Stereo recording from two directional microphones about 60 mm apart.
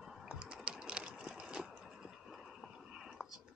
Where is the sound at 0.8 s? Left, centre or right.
Centre.